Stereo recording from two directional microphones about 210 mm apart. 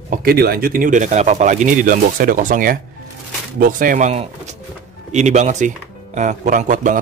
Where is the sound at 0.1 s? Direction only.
45° right (ahead or behind).